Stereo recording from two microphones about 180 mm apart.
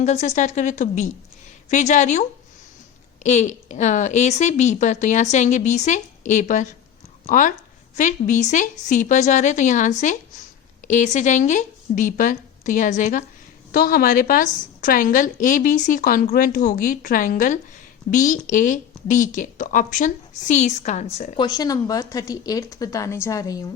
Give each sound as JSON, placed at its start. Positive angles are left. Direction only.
{"t": 0.0, "sound": "a woman's voice", "side_deg": 40}
{"t": 3.2, "sound": "a woman's voice", "side_deg": 40}
{"t": 21.3, "sound": "speech", "side_deg": 20}